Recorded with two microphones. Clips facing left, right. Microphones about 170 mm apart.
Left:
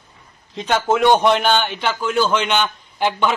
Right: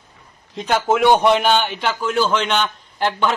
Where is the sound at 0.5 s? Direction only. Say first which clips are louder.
Even; 5° right (ahead or behind).